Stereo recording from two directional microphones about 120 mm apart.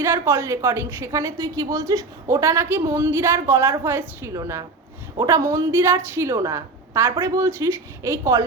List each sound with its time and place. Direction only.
0.0 s a woman's voice: 20° right (ahead or behind)